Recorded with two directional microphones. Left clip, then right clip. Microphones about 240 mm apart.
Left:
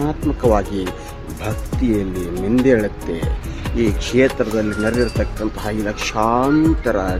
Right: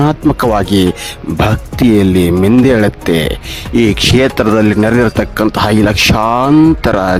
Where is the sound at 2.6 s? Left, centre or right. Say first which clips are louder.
Right 6 dB; right.